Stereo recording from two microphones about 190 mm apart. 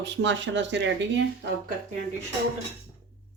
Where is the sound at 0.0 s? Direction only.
70° right (ahead or behind).